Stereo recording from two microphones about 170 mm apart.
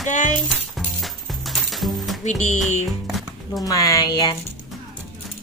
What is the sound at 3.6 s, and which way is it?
Speech, 20° left (ahead or behind).